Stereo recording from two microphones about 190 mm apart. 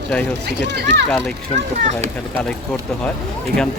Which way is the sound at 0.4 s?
60° right (ahead or behind).